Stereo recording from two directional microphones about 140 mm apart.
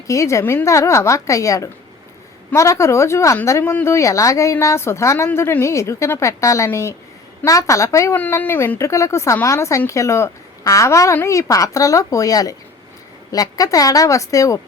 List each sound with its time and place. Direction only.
0.1 s a woman's voice: 20° left (ahead or behind)